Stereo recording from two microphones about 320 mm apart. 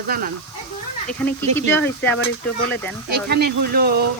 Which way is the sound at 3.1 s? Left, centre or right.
Right.